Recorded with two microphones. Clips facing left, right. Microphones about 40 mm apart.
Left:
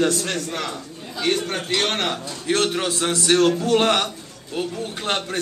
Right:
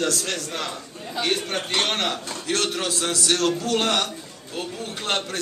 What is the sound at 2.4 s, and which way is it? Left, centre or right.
A man's voice, left.